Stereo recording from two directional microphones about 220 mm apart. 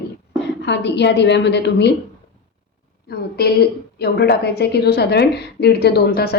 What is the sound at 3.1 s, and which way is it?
A woman's voice, 45° left (ahead or behind).